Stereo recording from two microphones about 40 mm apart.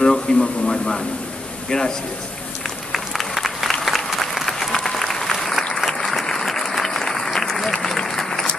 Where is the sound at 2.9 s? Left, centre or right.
Centre.